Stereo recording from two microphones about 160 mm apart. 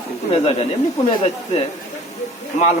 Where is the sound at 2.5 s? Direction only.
50° left (ahead or behind).